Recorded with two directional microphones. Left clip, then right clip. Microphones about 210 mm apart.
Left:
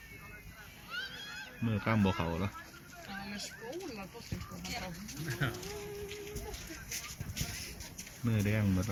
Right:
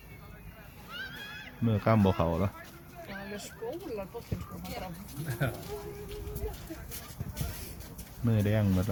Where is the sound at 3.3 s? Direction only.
50° right (ahead or behind).